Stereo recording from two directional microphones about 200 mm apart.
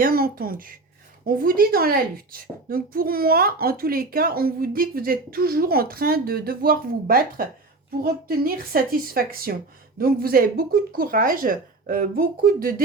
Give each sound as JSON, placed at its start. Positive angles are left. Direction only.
{"t": 0.0, "sound": "speech", "side_deg": -45}